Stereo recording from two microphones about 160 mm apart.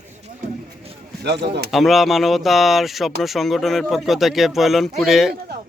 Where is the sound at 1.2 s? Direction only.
90° right.